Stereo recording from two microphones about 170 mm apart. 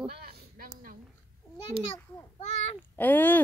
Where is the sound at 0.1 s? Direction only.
65° right (ahead or behind).